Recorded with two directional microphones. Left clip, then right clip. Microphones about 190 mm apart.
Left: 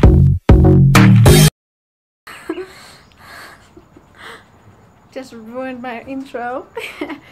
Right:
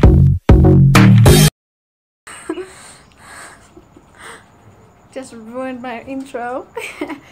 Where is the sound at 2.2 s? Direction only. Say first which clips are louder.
Even; centre (ahead or behind).